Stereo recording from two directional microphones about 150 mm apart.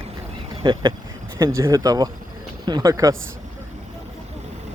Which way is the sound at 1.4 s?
20° right (ahead or behind).